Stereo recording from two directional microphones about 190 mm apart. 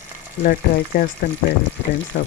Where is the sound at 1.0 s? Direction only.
60° left (ahead or behind).